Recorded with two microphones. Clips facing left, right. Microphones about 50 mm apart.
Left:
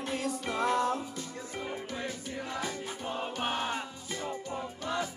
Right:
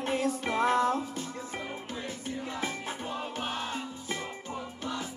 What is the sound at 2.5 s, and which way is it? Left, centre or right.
Music, right.